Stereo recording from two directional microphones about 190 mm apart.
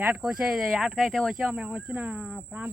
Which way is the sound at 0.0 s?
5° right (ahead or behind).